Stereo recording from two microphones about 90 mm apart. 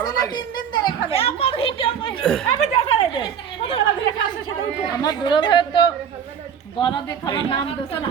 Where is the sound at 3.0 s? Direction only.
75° left (ahead or behind).